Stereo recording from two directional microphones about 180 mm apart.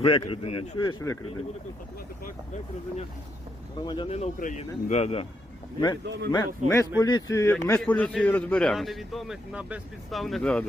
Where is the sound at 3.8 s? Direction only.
25° left (ahead or behind).